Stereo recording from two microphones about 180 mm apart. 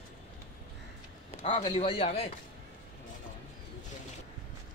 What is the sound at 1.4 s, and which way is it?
Speech, 30° left (ahead or behind).